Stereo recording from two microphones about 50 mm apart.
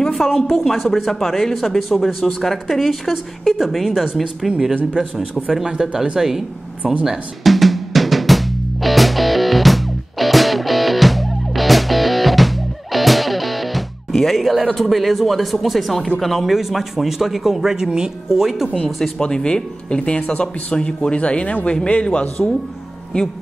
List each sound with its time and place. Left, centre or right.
0.0 s a man's voice: centre
6.8 s speech: right
7.1 s drum: centre
16.2 s a man's voice: centre
19.1 s speech: centre